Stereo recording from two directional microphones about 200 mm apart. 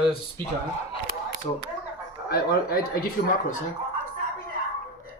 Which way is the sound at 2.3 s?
50° left (ahead or behind).